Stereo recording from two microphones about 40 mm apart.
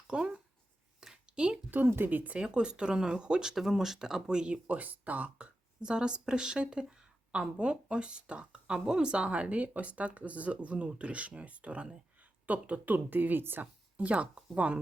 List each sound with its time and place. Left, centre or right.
0.1 s speech: right
1.0 s a sound: centre
1.7 s speech: right
2.4 s speech: right
3.5 s speech: centre
4.5 s speech: right
5.8 s a woman's voice: right
12.9 s speech: right
13.6 s a woman's voice: right